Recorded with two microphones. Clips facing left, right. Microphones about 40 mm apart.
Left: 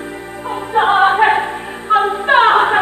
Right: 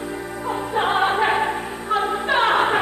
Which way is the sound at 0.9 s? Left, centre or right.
Left.